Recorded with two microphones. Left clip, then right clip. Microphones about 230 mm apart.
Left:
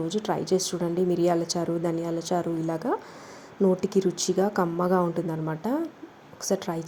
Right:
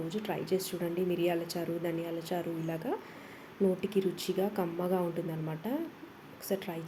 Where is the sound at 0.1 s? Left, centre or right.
Left.